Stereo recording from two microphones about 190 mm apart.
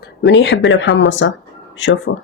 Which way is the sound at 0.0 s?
65° left (ahead or behind).